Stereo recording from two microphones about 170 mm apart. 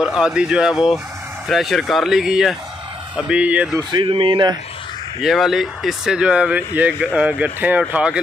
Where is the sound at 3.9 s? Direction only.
30° right (ahead or behind).